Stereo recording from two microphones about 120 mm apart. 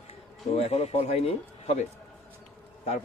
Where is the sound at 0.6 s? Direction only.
65° left (ahead or behind).